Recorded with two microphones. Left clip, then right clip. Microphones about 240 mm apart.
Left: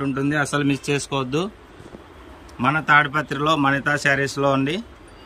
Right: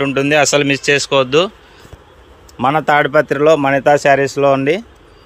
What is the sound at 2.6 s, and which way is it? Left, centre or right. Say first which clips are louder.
Speech: right 4 dB; centre.